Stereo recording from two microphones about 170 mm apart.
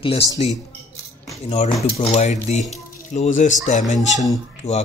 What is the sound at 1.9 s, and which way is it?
Speech, 40° left (ahead or behind).